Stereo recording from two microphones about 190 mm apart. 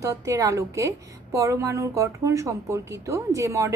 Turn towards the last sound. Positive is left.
turn(degrees=-15)  # may be behind; listen again after turning